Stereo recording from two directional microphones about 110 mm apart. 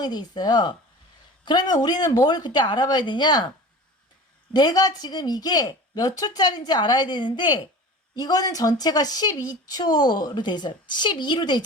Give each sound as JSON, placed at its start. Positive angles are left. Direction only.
{"t": 0.0, "sound": "speech", "side_deg": 40}
{"t": 4.5, "sound": "speech", "side_deg": 35}
{"t": 8.1, "sound": "speech", "side_deg": 35}